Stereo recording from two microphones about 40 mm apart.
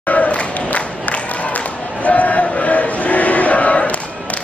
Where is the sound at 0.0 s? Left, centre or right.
Left.